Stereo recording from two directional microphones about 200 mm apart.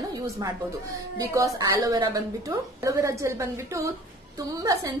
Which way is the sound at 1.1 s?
15° right (ahead or behind).